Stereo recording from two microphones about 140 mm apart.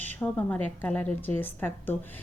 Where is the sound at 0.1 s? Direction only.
10° left (ahead or behind).